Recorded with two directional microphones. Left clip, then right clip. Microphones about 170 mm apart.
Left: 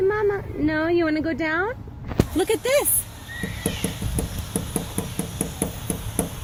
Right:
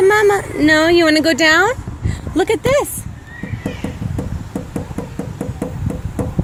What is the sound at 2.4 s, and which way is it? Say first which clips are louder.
Speech: right 7 dB; 35° right (ahead or behind).